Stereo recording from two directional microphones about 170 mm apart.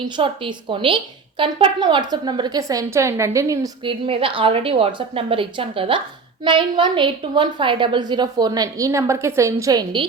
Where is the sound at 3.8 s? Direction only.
30° right (ahead or behind).